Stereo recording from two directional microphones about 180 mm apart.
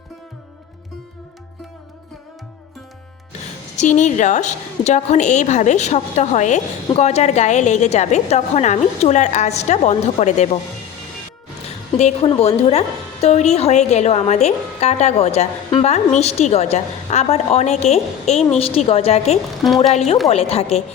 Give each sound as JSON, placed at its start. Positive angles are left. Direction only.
{"t": 3.8, "sound": "a woman's voice", "side_deg": 40}
{"t": 11.9, "sound": "a woman's voice", "side_deg": 35}
{"t": 19.6, "sound": "speech", "side_deg": 0}
{"t": 20.3, "sound": "a woman's voice", "side_deg": 35}